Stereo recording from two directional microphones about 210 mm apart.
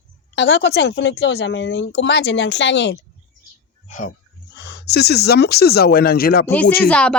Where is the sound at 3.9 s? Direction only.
40° left (ahead or behind).